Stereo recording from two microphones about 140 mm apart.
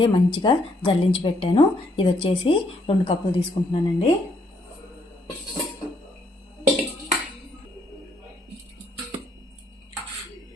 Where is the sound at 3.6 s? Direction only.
40° left (ahead or behind).